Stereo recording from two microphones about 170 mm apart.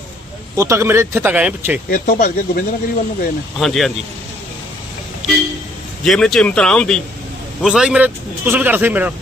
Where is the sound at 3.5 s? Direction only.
Centre (ahead or behind).